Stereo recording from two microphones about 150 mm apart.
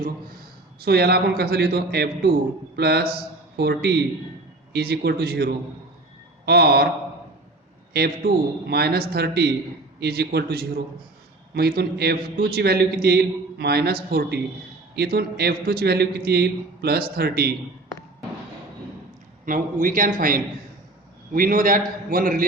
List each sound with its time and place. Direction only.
0.8 s a man's voice: 90° right
7.9 s a man's voice: 90° right
19.5 s a man's voice: 65° right (ahead or behind)